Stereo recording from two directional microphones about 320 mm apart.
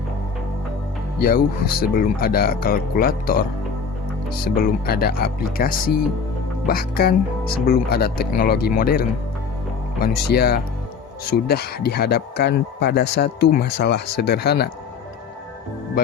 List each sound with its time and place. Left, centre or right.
1.2 s speech: left
4.4 s speech: left